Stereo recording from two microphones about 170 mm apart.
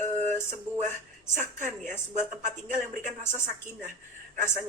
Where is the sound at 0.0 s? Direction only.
45° right (ahead or behind).